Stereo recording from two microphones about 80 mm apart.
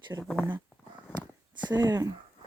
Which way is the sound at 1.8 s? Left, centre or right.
Right.